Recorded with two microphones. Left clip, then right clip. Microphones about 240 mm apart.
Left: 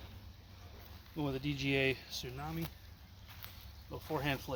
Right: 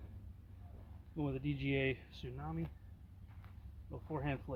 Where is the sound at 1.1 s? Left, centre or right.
Centre.